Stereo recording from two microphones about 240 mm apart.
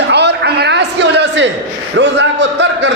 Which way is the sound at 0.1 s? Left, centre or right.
Right.